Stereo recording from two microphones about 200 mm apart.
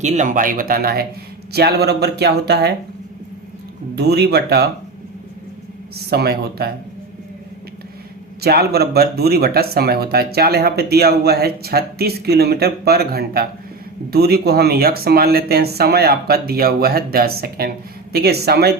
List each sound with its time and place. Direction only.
0.0 s speech: 35° right (ahead or behind); by 2.7 s 55° right (ahead or behind)
3.9 s speech: 55° right (ahead or behind)
6.1 s speech: 50° right (ahead or behind)
8.4 s speech: 50° right (ahead or behind)